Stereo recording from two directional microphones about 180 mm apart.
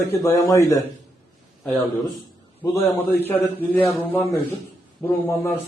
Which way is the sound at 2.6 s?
15° left (ahead or behind).